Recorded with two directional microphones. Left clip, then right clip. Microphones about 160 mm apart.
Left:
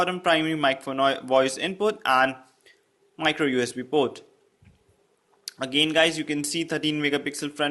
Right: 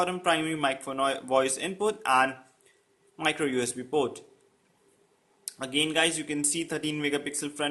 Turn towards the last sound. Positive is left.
turn(degrees=15)  # may be behind; listen again after turning